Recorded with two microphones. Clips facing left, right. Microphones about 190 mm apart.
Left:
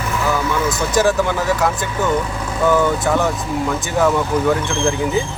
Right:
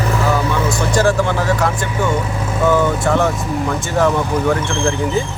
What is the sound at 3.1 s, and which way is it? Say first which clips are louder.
Speech: right 2 dB; 10° left (ahead or behind).